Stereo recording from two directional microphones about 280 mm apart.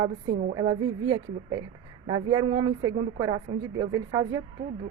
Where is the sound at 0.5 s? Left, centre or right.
Centre.